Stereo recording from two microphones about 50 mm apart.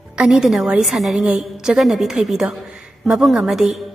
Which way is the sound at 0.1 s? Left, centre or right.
Centre.